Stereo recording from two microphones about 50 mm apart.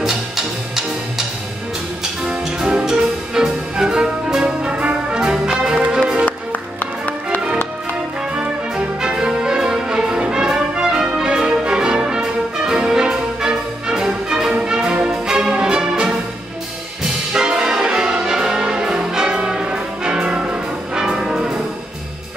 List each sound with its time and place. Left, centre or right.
2.2 s music: centre
8.4 s music: centre
17.0 s brass instrument: centre
18.9 s music: centre